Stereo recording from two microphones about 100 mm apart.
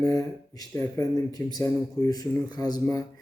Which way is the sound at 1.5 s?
40° left (ahead or behind).